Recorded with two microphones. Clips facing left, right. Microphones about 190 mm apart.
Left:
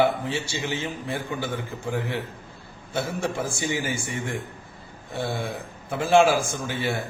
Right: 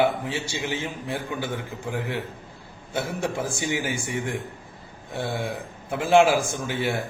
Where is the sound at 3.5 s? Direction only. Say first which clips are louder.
Even; 15° right (ahead or behind).